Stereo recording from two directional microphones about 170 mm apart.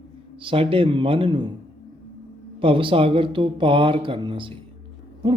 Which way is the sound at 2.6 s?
30° right (ahead or behind).